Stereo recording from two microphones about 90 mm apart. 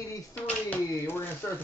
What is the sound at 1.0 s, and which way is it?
Speech, 25° left (ahead or behind).